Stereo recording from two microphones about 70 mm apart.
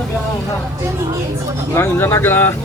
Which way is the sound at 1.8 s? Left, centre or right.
Left.